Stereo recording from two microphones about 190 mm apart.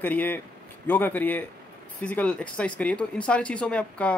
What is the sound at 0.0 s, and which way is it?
Speech, 10° left (ahead or behind).